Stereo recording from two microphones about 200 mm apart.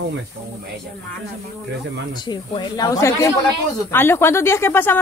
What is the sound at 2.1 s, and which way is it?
Speech, 20° left (ahead or behind).